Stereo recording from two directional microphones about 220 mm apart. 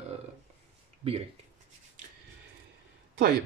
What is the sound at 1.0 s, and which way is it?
Speech, 30° right (ahead or behind).